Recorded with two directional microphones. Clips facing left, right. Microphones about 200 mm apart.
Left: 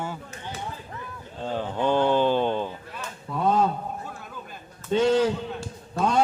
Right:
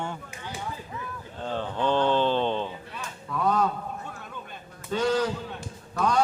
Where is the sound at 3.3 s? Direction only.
25° left (ahead or behind).